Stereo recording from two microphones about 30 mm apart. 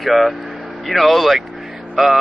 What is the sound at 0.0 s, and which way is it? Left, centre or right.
A man's voice, centre.